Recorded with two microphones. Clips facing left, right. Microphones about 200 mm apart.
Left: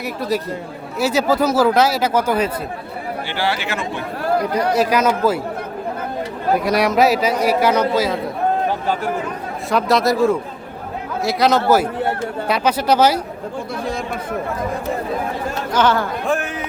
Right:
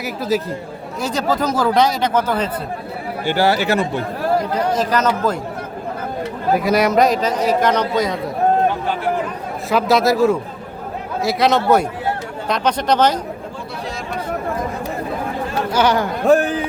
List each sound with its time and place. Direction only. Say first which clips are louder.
0.0 s speech: right 1 dB; centre (ahead or behind)
3.2 s speech: right 8 dB; 40° right (ahead or behind)
4.5 s speech: left 1 dB; 10° left (ahead or behind)
6.6 s speech: right 1 dB; centre (ahead or behind)
9.6 s speech: right 1 dB; centre (ahead or behind)
15.7 s speech: even; 10° right (ahead or behind)
16.2 s speech: right 7 dB; 35° right (ahead or behind)